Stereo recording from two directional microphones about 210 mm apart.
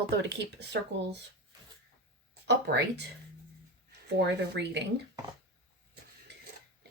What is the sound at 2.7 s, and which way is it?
Speech, 55° right (ahead or behind).